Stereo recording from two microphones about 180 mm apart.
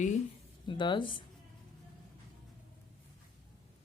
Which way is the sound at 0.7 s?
25° left (ahead or behind).